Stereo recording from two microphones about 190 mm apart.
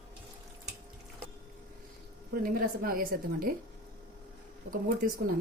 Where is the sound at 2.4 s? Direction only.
50° right (ahead or behind).